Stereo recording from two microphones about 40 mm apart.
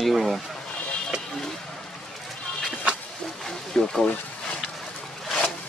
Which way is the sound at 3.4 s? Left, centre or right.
Centre.